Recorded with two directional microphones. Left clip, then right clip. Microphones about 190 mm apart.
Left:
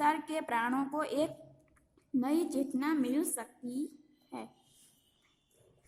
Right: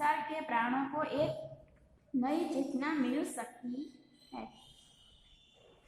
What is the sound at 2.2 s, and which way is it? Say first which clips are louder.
A woman's voice: left 1 dB; 45° left (ahead or behind).